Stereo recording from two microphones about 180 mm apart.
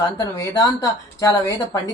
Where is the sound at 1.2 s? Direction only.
20° left (ahead or behind).